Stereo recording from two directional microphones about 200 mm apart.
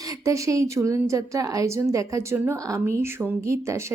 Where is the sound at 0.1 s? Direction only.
15° right (ahead or behind).